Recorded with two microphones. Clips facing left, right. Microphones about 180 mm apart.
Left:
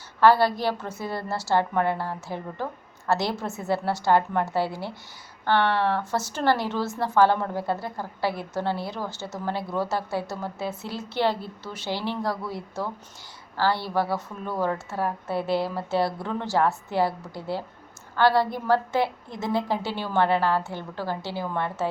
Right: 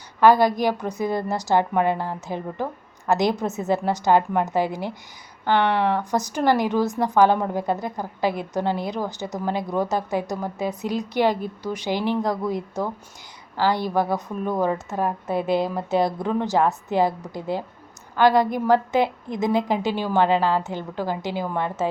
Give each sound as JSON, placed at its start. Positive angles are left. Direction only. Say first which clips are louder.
{"t": 0.2, "sound": "a woman's voice", "louder": "right 3 dB", "side_deg": -15}